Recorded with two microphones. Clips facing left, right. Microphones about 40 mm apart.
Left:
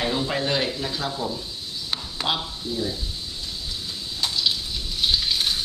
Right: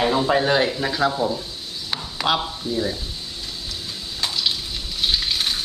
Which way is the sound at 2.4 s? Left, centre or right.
Right.